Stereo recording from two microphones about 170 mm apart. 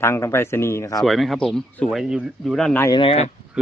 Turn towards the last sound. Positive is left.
turn(degrees=40)  # may be behind; listen again after turning